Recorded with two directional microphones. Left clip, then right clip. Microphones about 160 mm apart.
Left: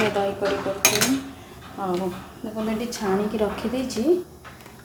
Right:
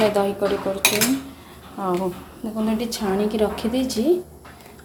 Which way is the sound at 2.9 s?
20° right (ahead or behind).